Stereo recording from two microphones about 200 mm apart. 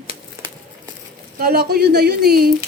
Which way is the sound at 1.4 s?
50° right (ahead or behind).